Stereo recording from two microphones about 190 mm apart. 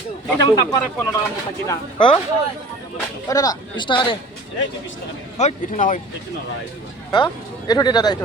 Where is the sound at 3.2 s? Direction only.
20° left (ahead or behind).